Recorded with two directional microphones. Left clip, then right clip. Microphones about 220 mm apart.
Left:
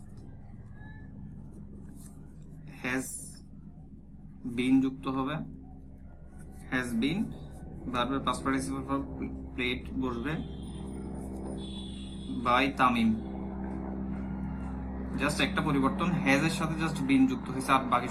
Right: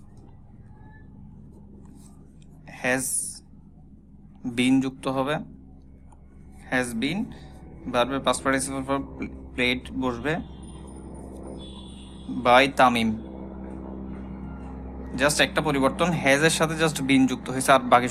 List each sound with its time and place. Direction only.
2.6 s a sound: 50° right (ahead or behind)
4.5 s speech: 45° right (ahead or behind)
6.7 s speech: 50° right (ahead or behind)
12.4 s speech: 50° right (ahead or behind)
15.1 s speech: 50° right (ahead or behind)